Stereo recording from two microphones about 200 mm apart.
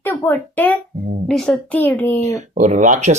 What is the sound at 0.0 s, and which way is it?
A child's voice, 10° left (ahead or behind).